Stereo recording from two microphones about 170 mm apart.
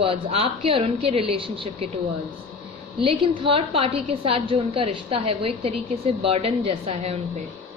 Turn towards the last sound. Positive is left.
turn(degrees=-40)  # may be behind; listen again after turning